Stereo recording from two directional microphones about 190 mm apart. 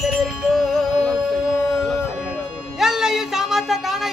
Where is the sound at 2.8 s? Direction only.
Centre (ahead or behind).